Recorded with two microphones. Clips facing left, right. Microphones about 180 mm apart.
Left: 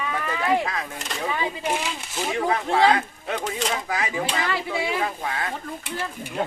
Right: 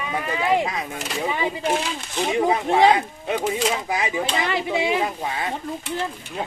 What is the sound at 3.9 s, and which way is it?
Speech, 20° right (ahead or behind).